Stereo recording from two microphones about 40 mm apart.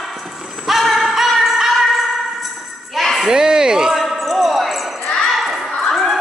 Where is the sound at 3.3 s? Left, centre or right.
Centre.